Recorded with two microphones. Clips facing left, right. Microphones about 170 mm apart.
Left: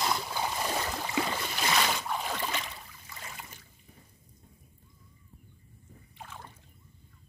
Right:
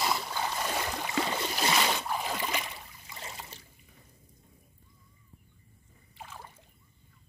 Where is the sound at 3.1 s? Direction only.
25° right (ahead or behind).